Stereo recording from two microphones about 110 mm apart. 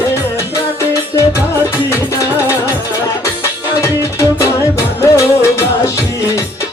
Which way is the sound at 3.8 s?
25° left (ahead or behind).